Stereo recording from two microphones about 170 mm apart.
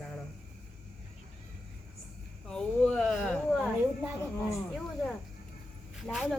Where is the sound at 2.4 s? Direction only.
5° left (ahead or behind).